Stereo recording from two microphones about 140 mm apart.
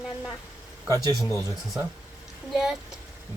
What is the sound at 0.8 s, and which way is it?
Speech, 25° right (ahead or behind).